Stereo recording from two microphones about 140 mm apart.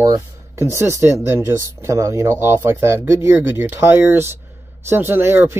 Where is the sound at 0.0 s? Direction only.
20° right (ahead or behind).